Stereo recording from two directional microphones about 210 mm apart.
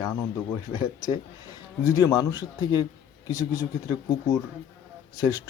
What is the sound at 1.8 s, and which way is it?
Speech, 15° left (ahead or behind).